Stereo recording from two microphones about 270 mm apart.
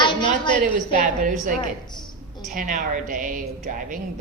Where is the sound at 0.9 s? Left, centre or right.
Right.